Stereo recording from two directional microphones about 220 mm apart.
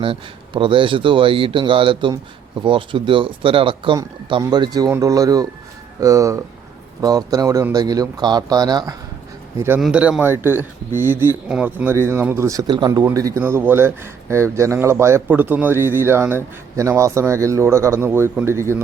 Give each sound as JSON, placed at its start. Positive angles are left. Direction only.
{"t": 0.0, "sound": "speech", "side_deg": -25}